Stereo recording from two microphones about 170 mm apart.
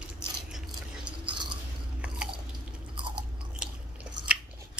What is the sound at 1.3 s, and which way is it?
Chewing, 30° right (ahead or behind).